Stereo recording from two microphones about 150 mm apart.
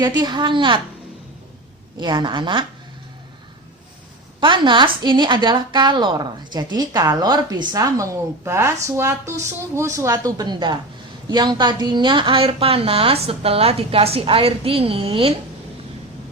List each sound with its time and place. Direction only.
0.0 s a woman's voice: 30° right (ahead or behind)
2.0 s a woman's voice: 30° right (ahead or behind)
4.4 s a woman's voice: 30° right (ahead or behind)